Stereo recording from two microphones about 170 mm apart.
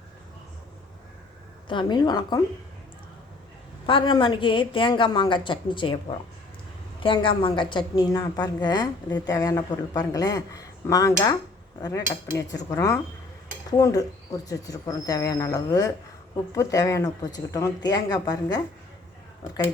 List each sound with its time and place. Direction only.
1.6 s a woman's voice: 25° left (ahead or behind)
3.8 s a woman's voice: 30° left (ahead or behind)